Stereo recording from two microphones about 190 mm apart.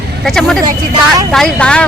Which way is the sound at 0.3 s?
Centre (ahead or behind).